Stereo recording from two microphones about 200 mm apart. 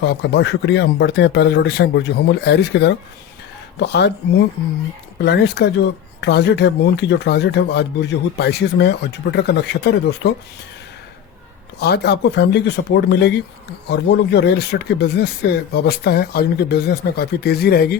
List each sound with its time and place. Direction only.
0.0 s speech: 55° left (ahead or behind)
11.8 s speech: 55° left (ahead or behind)